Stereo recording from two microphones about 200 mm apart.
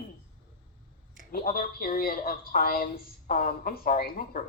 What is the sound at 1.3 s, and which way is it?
A woman's voice, 45° left (ahead or behind).